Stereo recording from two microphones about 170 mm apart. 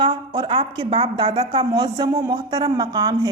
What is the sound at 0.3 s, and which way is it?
A woman's voice, 30° right (ahead or behind).